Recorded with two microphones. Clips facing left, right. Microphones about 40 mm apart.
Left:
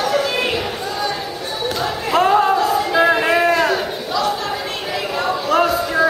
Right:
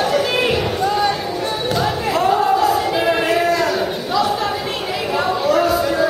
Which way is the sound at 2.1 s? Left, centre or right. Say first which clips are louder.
Left 2 dB; left.